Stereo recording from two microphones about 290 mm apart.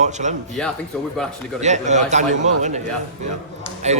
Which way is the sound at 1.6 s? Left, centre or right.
Right.